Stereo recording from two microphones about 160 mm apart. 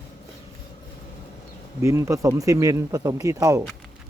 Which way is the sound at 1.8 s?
15° right (ahead or behind).